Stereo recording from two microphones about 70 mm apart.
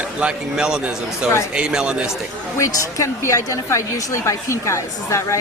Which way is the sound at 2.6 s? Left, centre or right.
Left.